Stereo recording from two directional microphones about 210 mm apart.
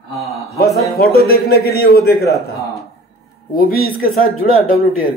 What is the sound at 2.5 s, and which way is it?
Speech, 15° left (ahead or behind).